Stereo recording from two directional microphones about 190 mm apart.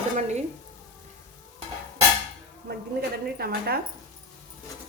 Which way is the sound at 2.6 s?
55° right (ahead or behind).